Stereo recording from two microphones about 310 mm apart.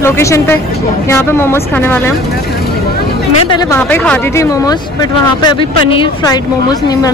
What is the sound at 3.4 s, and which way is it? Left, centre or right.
Speech, centre.